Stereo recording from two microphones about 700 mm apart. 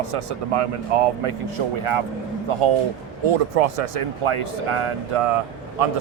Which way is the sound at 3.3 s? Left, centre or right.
Right.